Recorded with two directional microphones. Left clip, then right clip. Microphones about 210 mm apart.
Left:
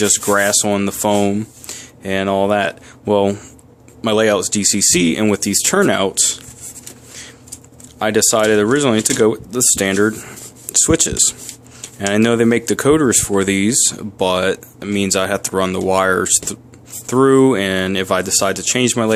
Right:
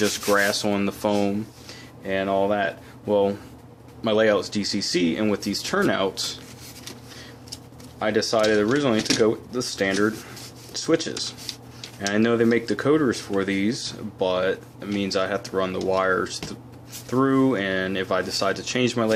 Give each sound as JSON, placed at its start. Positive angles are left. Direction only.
{"t": 0.0, "sound": "speech", "side_deg": 35}
{"t": 1.6, "sound": "speech", "side_deg": 45}
{"t": 7.9, "sound": "speech", "side_deg": 45}